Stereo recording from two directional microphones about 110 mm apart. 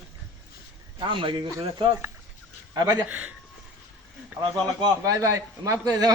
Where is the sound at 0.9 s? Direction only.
50° right (ahead or behind).